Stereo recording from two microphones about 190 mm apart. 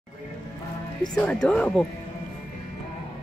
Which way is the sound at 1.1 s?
5° left (ahead or behind).